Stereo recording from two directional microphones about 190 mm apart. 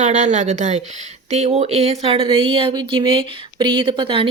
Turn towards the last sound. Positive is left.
turn(degrees=-25)  # may be behind; listen again after turning